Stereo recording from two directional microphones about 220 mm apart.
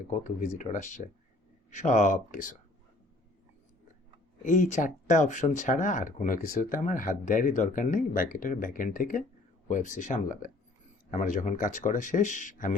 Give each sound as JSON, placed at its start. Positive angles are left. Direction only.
{"t": 0.1, "sound": "speech", "side_deg": 35}
{"t": 4.4, "sound": "speech", "side_deg": 35}